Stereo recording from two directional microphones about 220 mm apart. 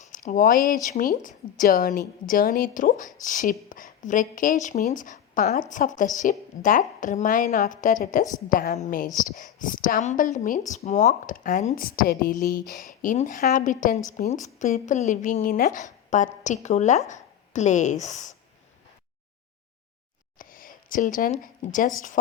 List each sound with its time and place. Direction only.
0.1 s a woman's voice: 35° left (ahead or behind)
17.1 s a sound: 35° left (ahead or behind)
18.0 s a woman's voice: 35° left (ahead or behind)
20.4 s speech: 40° left (ahead or behind)